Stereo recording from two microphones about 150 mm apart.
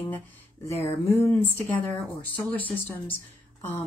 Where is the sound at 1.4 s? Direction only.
10° left (ahead or behind).